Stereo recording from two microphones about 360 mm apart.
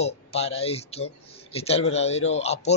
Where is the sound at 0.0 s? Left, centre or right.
Centre.